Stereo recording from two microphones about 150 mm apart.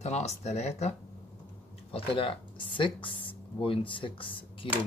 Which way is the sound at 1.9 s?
35° left (ahead or behind).